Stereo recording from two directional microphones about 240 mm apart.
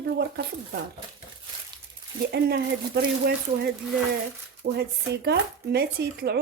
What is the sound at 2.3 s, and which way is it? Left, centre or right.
Speech, right.